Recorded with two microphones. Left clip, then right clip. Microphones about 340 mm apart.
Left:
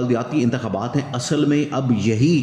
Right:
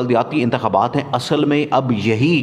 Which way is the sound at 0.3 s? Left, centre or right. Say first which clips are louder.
Right 5 dB; centre.